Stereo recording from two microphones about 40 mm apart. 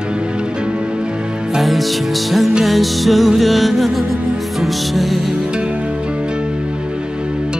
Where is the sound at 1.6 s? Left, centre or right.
Centre.